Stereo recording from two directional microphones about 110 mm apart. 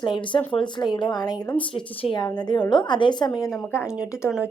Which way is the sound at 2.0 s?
50° left (ahead or behind).